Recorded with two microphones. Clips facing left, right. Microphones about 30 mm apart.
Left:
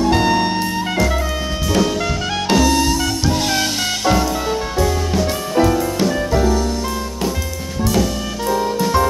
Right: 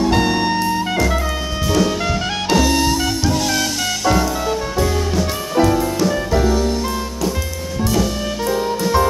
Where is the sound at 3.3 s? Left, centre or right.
Left.